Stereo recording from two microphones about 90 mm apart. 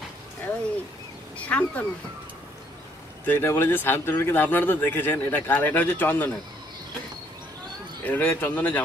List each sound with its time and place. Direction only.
1.4 s speech: 15° left (ahead or behind)
3.3 s a man's voice: 25° left (ahead or behind)
8.0 s a man's voice: 20° left (ahead or behind)